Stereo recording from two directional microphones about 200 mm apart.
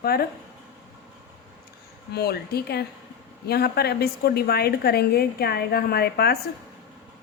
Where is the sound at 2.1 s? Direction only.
50° left (ahead or behind).